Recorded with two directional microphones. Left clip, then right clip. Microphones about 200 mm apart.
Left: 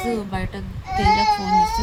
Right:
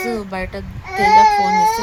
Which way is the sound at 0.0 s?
25° right (ahead or behind).